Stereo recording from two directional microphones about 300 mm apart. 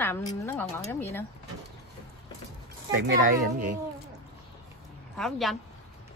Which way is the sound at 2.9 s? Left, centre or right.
Right.